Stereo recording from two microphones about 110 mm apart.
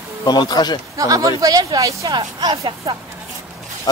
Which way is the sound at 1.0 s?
30° right (ahead or behind).